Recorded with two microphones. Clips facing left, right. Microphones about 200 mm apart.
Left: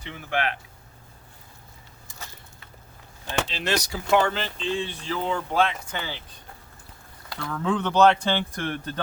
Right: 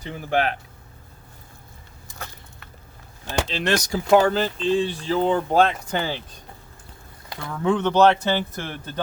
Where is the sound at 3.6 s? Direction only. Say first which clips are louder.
Right 4 dB; 50° right (ahead or behind).